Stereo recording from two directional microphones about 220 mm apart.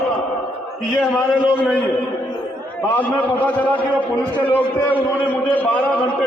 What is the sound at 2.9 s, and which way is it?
A man's voice, 5° left (ahead or behind).